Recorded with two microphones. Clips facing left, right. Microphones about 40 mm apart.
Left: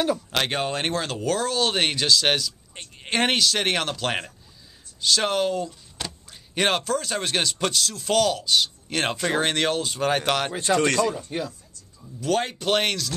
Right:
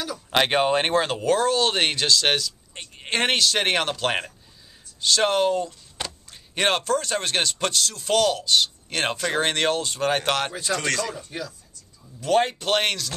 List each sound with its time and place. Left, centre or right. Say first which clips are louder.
0.3 s speech: right 5 dB; right; by 10.5 s centre
10.5 s speech: left 4 dB; left
12.3 s speech: right 3 dB; centre
12.5 s speech: even; centre